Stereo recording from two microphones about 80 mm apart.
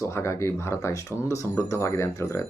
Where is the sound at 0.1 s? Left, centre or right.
Left.